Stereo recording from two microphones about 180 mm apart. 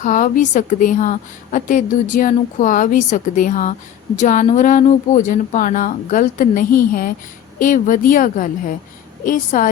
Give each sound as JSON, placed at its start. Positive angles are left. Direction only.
{"t": 0.0, "sound": "a woman's voice", "side_deg": 45}